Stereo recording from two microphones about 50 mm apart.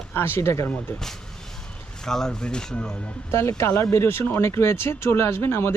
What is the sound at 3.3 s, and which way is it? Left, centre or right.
Speech, left.